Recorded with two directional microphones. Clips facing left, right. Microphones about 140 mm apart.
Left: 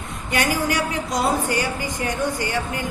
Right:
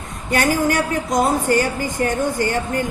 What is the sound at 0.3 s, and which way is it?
A woman's voice, 45° right (ahead or behind).